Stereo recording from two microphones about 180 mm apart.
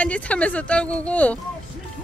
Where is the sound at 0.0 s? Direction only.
5° left (ahead or behind).